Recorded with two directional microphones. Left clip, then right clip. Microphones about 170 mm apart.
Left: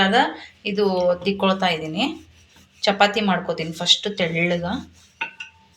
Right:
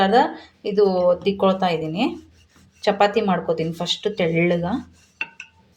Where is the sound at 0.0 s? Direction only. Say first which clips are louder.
Right 1 dB; 60° right (ahead or behind).